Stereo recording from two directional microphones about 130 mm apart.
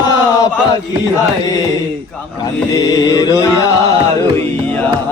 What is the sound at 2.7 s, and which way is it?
Music, 30° left (ahead or behind).